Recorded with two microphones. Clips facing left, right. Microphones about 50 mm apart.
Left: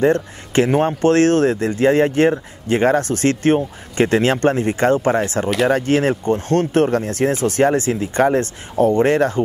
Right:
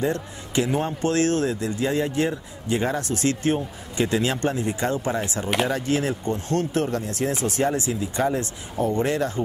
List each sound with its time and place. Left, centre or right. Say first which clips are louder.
0.0 s speech: left 9 dB; left